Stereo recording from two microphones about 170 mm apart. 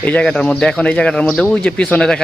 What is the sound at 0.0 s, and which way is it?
Speech, 10° left (ahead or behind).